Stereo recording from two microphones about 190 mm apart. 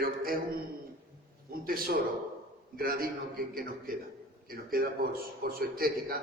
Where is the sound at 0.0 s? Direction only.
50° right (ahead or behind).